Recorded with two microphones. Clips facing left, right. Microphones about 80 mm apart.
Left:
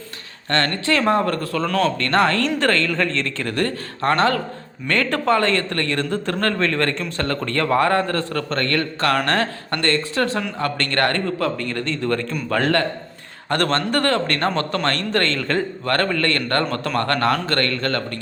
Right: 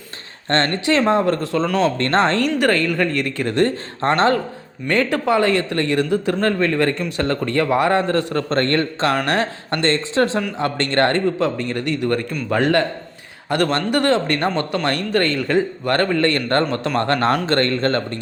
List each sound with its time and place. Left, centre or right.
0.5 s a man's voice: right
2.0 s speech: right
2.6 s a man's voice: centre
9.2 s a man's voice: centre
14.5 s a man's voice: centre; by 18.2 s right